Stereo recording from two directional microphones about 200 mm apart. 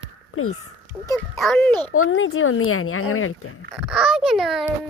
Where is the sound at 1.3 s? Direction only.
Centre (ahead or behind).